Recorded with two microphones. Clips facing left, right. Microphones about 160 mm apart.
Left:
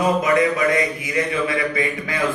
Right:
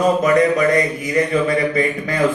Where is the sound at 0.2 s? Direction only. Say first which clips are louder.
Right 4 dB; 40° right (ahead or behind).